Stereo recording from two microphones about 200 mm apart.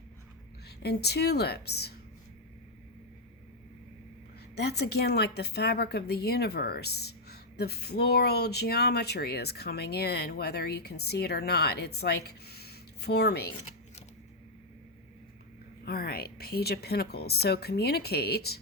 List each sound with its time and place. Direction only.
0.8 s a woman's voice: 55° left (ahead or behind)
4.5 s a woman's voice: 55° left (ahead or behind)
15.8 s a woman's voice: 50° left (ahead or behind)